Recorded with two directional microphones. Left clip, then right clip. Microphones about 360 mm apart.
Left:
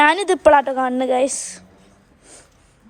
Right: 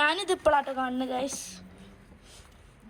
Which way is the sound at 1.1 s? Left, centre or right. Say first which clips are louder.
Left 13 dB; centre.